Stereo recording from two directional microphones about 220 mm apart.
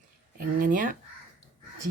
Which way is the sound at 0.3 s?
35° right (ahead or behind).